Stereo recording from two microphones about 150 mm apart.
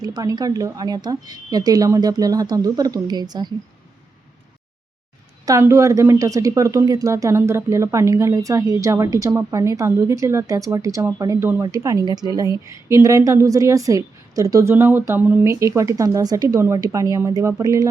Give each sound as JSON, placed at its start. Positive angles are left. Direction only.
{"t": 0.0, "sound": "speech", "side_deg": -25}
{"t": 5.5, "sound": "speech", "side_deg": -20}